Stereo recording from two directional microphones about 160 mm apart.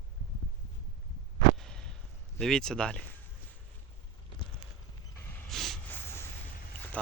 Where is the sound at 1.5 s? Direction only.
5° left (ahead or behind).